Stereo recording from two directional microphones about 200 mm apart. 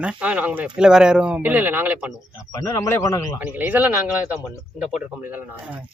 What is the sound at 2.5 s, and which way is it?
Speech, 15° left (ahead or behind).